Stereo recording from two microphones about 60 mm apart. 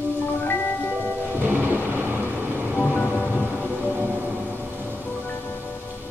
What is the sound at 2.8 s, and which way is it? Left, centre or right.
Music, left.